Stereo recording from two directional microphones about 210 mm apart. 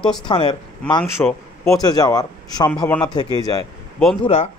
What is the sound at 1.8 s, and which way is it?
A man's voice, 20° left (ahead or behind).